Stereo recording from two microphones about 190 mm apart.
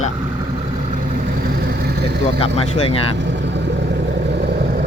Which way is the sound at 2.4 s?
30° left (ahead or behind).